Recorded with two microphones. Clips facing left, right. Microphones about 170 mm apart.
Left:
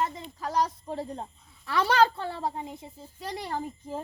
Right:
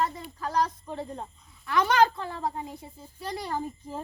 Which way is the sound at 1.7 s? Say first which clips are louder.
Right 1 dB; 30° left (ahead or behind).